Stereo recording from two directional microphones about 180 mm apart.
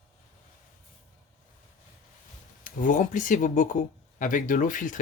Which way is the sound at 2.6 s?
45° left (ahead or behind).